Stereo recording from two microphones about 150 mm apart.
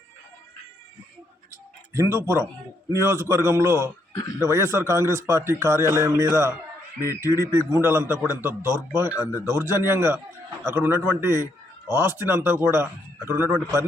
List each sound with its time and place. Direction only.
1.9 s a man's voice: 15° right (ahead or behind)